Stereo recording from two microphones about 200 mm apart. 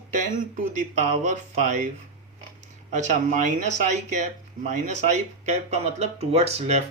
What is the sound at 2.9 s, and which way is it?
Speech, 35° right (ahead or behind).